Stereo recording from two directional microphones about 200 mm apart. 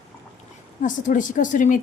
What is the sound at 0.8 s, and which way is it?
A woman's voice, 40° left (ahead or behind).